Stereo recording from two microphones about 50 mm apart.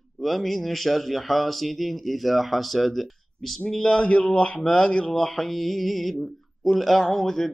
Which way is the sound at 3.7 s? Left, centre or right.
Centre.